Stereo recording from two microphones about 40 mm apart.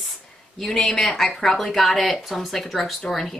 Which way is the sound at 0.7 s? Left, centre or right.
Centre.